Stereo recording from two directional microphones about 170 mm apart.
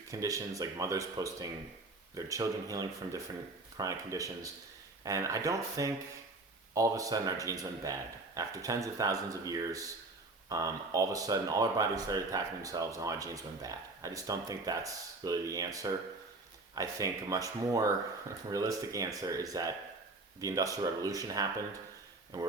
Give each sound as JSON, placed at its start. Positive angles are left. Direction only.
{"t": 0.1, "sound": "speech", "side_deg": -20}